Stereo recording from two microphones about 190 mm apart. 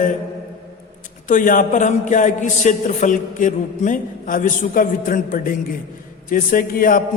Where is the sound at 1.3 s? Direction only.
45° left (ahead or behind).